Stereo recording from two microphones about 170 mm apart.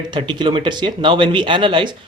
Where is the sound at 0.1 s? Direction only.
30° right (ahead or behind).